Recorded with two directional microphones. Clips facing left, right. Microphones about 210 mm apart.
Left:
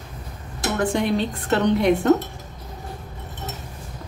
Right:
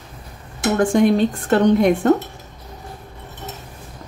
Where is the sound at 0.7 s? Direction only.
45° right (ahead or behind).